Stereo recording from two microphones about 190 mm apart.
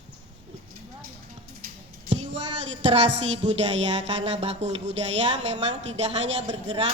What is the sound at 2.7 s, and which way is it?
Music, 35° right (ahead or behind).